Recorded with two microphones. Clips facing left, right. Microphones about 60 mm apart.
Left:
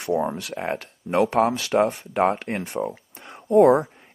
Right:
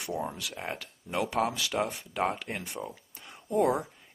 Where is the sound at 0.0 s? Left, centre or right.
Left.